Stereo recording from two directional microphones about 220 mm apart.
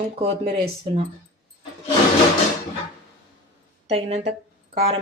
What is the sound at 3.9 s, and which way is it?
Speech, 30° right (ahead or behind).